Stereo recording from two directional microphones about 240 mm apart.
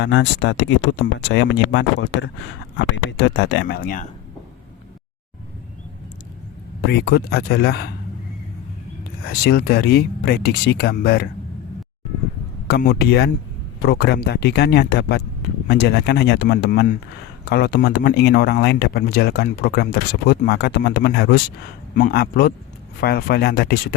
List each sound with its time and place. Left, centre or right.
0.0 s speech: left
6.9 s a man's voice: left
9.2 s a man's voice: left
12.6 s a man's voice: left